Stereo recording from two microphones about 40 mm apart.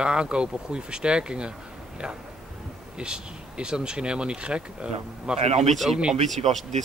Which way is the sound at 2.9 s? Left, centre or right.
Right.